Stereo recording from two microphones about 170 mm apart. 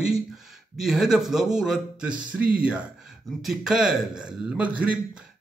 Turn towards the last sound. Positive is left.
turn(degrees=-10)  # may be behind; listen again after turning